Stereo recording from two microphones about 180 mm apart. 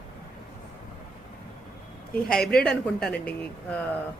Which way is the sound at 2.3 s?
5° left (ahead or behind).